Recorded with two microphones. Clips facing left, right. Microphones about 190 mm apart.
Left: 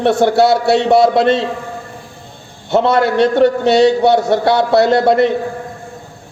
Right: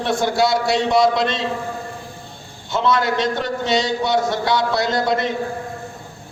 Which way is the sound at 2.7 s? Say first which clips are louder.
Left 6 dB; 60° left (ahead or behind).